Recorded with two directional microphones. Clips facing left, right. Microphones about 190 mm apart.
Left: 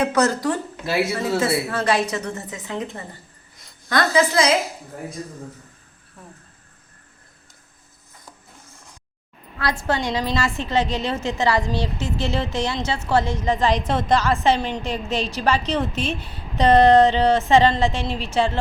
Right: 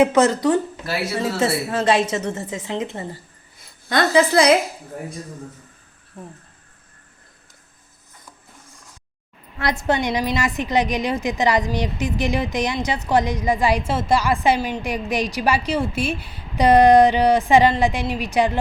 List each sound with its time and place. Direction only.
0.0 s a woman's voice: 20° right (ahead or behind)
9.6 s a woman's voice: 20° right (ahead or behind)